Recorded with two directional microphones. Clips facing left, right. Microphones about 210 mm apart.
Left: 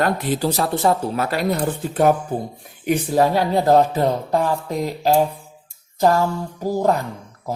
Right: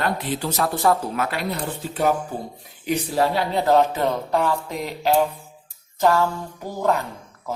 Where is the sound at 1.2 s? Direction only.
40° left (ahead or behind).